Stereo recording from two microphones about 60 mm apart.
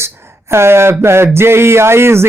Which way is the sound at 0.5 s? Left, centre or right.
Right.